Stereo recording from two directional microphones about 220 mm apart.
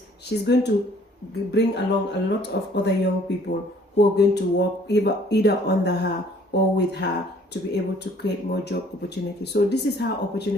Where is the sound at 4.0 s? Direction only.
50° left (ahead or behind).